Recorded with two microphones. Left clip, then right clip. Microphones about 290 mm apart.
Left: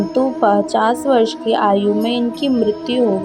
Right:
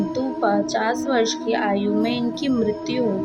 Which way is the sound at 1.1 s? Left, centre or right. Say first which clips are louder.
Left 6 dB; centre.